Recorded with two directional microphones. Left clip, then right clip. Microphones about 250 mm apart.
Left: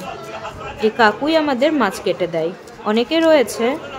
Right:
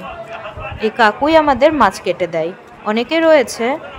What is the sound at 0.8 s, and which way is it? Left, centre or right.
A woman's voice, centre.